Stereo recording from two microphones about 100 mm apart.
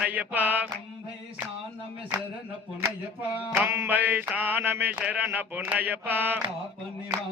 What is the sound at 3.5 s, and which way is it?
Mantra, 20° right (ahead or behind).